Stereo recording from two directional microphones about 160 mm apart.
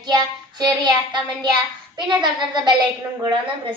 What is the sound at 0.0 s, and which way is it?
Child singing, 25° right (ahead or behind).